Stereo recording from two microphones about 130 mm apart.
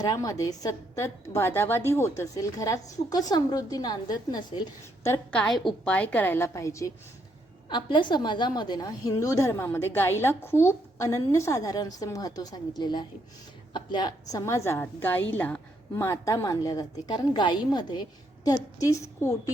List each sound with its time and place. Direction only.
0.0 s a woman's voice: 30° left (ahead or behind)
5.3 s a woman's voice: 5° left (ahead or behind); by 6.9 s 25° left (ahead or behind)
7.7 s a woman's voice: 40° left (ahead or behind)